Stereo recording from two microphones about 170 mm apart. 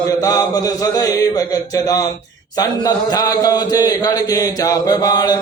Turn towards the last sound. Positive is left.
turn(degrees=20)  # may be behind; listen again after turning